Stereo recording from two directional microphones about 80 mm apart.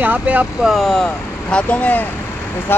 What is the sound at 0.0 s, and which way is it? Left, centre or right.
Speech, right.